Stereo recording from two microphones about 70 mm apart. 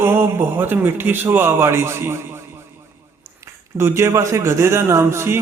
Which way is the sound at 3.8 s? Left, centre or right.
Right.